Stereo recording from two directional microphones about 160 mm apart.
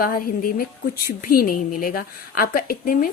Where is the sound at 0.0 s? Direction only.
65° left (ahead or behind).